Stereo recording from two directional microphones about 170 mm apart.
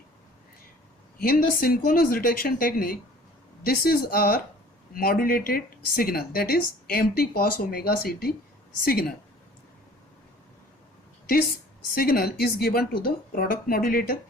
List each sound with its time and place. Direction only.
1.2 s speech: 60° left (ahead or behind)
11.9 s speech: 60° left (ahead or behind)